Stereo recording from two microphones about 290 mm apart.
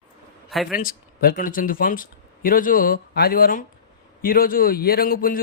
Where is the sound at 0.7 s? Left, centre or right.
Left.